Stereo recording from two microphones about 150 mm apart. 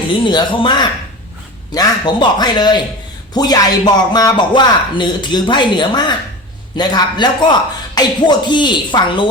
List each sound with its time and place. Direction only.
0.3 s a man's voice: 30° left (ahead or behind)